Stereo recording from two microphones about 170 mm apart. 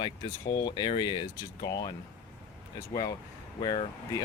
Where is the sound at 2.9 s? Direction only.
20° left (ahead or behind).